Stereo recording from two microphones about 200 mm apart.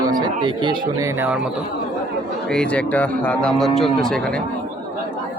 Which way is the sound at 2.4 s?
5° left (ahead or behind).